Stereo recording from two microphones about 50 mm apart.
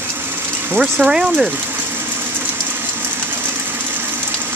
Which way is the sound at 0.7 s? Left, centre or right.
Centre.